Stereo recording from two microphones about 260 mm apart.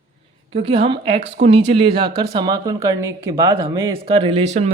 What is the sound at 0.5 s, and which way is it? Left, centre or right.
Speech, right.